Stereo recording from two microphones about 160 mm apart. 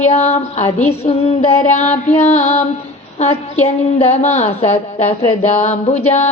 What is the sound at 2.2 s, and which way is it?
A woman's voice, 45° left (ahead or behind).